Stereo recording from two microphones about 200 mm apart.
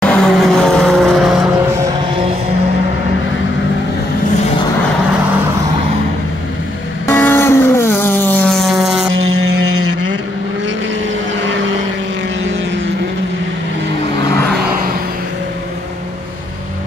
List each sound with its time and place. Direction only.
0.0 s vehicle: 5° left (ahead or behind)
7.1 s vehicle: 10° left (ahead or behind)